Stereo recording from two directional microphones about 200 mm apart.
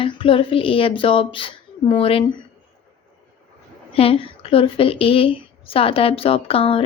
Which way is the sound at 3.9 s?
30° left (ahead or behind).